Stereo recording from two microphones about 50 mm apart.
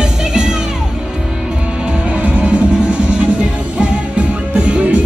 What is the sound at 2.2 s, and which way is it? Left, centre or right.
Music, right.